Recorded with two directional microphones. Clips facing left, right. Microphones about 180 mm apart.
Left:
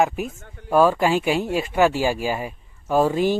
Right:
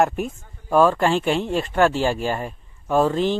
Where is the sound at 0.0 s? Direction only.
Centre (ahead or behind).